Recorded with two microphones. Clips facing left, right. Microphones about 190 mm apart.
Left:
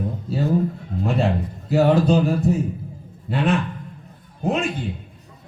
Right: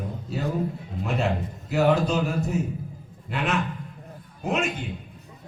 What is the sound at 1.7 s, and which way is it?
A man's voice, 35° left (ahead or behind).